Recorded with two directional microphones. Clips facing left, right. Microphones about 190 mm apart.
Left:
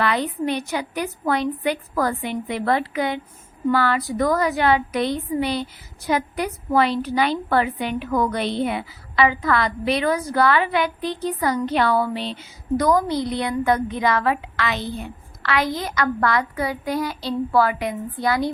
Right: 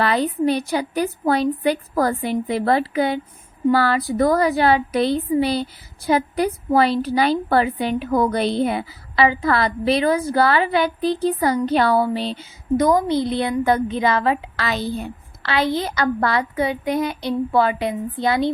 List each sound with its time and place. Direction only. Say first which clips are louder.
0.0 s a woman's voice: right 3 dB; 35° right (ahead or behind)
12.7 s a woman's voice: right 2 dB; 25° right (ahead or behind)